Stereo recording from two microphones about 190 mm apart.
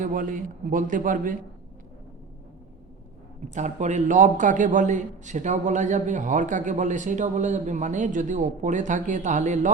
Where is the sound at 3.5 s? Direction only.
40° right (ahead or behind).